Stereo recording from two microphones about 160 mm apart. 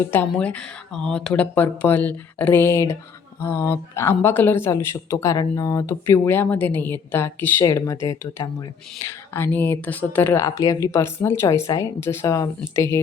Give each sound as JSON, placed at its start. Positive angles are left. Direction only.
{"t": 0.1, "sound": "speech", "side_deg": 10}